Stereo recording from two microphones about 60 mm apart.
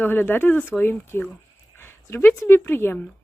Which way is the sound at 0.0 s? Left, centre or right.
Left.